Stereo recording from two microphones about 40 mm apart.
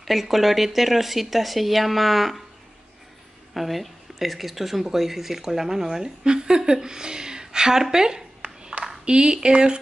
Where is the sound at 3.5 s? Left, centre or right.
Centre.